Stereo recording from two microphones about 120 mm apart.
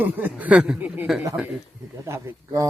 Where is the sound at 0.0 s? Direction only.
15° right (ahead or behind).